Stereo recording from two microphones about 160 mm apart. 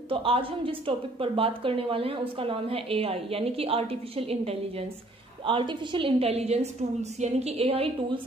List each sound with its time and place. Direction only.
0.1 s a woman's voice: 35° right (ahead or behind)